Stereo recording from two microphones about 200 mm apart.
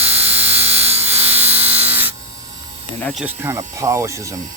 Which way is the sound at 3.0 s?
5° left (ahead or behind).